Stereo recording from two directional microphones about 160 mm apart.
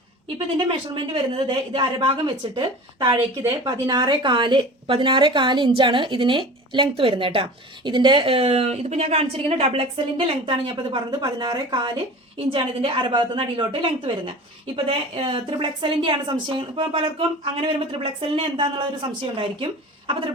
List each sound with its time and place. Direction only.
0.3 s a woman's voice: 30° right (ahead or behind)